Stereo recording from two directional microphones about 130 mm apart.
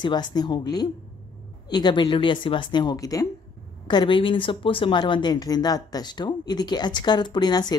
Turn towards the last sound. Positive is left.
turn(degrees=30)  # may be behind; listen again after turning